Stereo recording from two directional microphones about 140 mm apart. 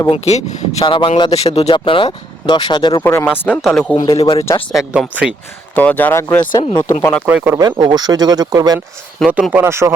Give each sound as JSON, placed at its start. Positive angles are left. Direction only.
{"t": 0.1, "sound": "speech", "side_deg": 50}
{"t": 0.9, "sound": "speech", "side_deg": 35}
{"t": 3.0, "sound": "speech", "side_deg": 15}
{"t": 3.6, "sound": "speech", "side_deg": 0}
{"t": 4.0, "sound": "speech", "side_deg": 40}
{"t": 4.7, "sound": "speech", "side_deg": -5}
{"t": 5.7, "sound": "speech", "side_deg": 10}
{"t": 6.4, "sound": "speech", "side_deg": 35}
{"t": 7.3, "sound": "speech", "side_deg": -10}
{"t": 7.5, "sound": "speech", "side_deg": -30}
{"t": 9.2, "sound": "speech", "side_deg": -5}
{"t": 9.5, "sound": "speech", "side_deg": -15}